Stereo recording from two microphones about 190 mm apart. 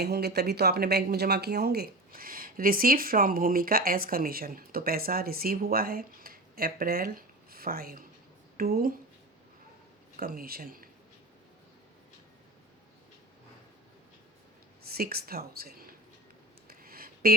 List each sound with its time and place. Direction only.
0.0 s a woman's voice: 60° right (ahead or behind)
10.2 s speech: 50° right (ahead or behind)
14.8 s speech: 55° right (ahead or behind)
16.6 s a sound: 50° right (ahead or behind)